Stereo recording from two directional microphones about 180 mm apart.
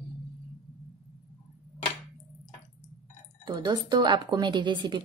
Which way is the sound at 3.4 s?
25° right (ahead or behind).